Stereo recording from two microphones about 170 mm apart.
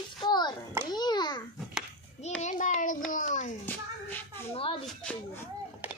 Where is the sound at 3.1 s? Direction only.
50° left (ahead or behind).